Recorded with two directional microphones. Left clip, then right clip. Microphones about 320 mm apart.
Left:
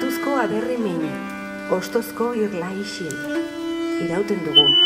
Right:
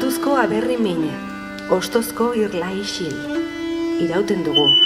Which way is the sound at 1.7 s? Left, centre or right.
Right.